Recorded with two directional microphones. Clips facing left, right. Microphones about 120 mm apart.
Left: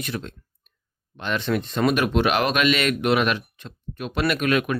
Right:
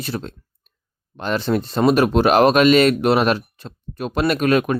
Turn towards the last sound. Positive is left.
turn(degrees=-35)  # may be behind; listen again after turning